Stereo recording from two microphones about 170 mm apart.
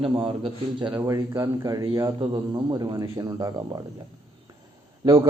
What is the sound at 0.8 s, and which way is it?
A man's voice, 20° right (ahead or behind).